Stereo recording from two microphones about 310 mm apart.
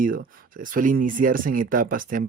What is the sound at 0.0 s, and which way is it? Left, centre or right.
Speech, right.